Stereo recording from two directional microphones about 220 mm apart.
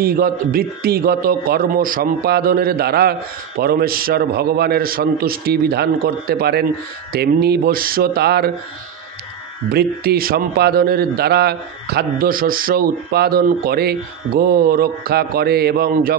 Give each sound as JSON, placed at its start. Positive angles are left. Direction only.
{"t": 0.0, "sound": "a man's voice", "side_deg": -40}
{"t": 9.7, "sound": "a man's voice", "side_deg": -45}